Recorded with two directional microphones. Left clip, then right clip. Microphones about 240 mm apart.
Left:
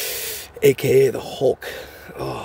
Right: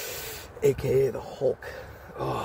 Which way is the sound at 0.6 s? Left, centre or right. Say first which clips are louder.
Left 8 dB; left.